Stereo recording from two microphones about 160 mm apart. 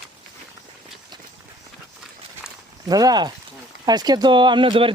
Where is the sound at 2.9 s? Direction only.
25° right (ahead or behind).